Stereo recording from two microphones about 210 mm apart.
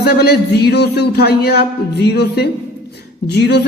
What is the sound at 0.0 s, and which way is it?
Speech, 50° left (ahead or behind).